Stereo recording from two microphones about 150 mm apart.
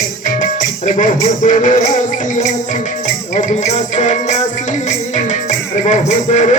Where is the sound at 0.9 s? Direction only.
55° left (ahead or behind).